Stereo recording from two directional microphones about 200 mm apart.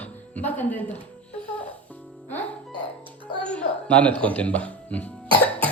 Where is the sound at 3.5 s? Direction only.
5° left (ahead or behind).